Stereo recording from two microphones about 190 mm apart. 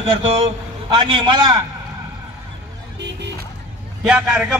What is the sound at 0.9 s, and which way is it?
Speech, 25° right (ahead or behind).